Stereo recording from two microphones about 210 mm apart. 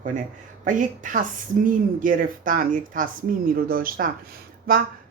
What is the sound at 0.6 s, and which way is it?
A woman's voice, 35° right (ahead or behind).